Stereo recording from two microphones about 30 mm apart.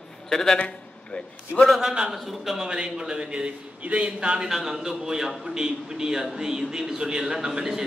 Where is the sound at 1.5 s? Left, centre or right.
Left.